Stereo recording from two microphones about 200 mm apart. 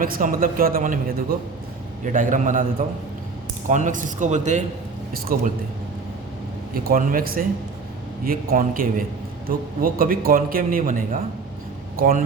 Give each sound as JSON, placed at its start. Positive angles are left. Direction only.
{"t": 0.0, "sound": "a man's voice", "side_deg": -45}
{"t": 2.1, "sound": "a man's voice", "side_deg": -40}
{"t": 3.7, "sound": "a man's voice", "side_deg": -40}
{"t": 6.7, "sound": "a man's voice", "side_deg": -45}